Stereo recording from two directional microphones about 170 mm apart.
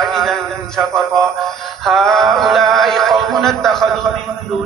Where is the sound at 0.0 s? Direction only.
Centre (ahead or behind).